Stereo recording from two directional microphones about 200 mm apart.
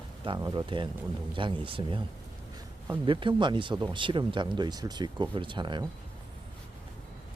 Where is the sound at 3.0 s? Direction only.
25° right (ahead or behind).